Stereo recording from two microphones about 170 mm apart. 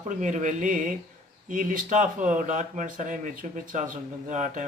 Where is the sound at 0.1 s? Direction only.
45° right (ahead or behind).